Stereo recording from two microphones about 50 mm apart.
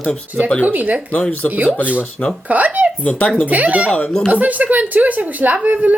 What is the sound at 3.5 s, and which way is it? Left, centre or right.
A woman's voice, right.